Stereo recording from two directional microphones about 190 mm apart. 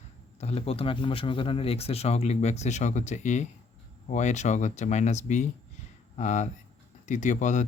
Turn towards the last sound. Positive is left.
turn(degrees=40)  # may be behind; listen again after turning